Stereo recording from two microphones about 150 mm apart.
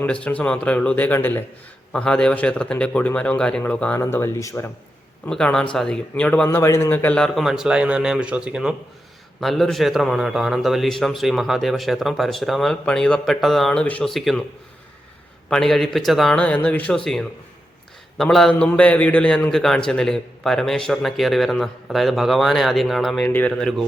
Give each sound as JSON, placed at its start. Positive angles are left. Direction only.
{"t": 0.0, "sound": "a man's voice", "side_deg": 10}
{"t": 5.2, "sound": "a man's voice", "side_deg": 5}
{"t": 15.4, "sound": "a man's voice", "side_deg": 5}